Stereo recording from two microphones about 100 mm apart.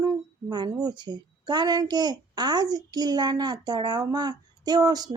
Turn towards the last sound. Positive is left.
turn(degrees=-40)  # may be behind; listen again after turning